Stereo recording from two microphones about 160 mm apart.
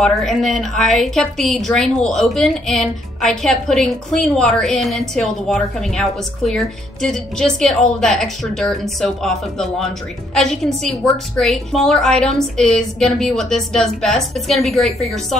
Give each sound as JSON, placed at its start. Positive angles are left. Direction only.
{"t": 0.0, "sound": "a woman's voice", "side_deg": 0}